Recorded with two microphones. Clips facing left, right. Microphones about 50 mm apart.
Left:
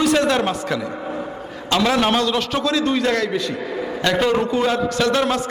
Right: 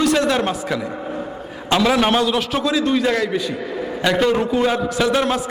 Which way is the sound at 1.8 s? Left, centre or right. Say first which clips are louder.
Right 1 dB; centre.